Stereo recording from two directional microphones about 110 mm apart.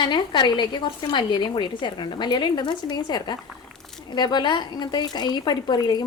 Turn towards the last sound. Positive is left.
turn(degrees=40)  # may be behind; listen again after turning